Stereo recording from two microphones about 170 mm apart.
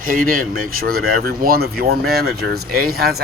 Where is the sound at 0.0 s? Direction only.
55° right (ahead or behind).